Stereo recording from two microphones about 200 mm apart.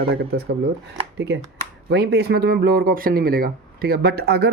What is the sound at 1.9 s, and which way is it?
Speech, 55° right (ahead or behind).